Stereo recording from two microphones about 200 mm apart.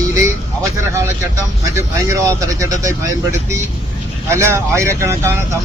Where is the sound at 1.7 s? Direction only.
15° right (ahead or behind).